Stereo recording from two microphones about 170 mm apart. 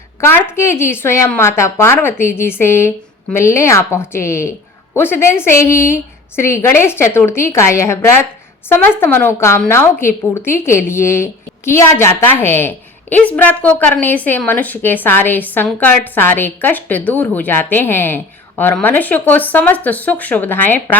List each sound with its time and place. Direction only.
0.2 s a woman's voice: 15° left (ahead or behind)